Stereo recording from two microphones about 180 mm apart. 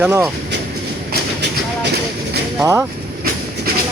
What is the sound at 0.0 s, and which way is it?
Speech, 10° right (ahead or behind).